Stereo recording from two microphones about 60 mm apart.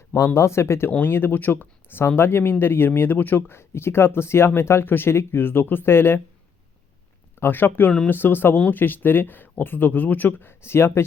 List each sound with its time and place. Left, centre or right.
0.3 s speech: left
0.9 s speech: left
7.3 s speech: left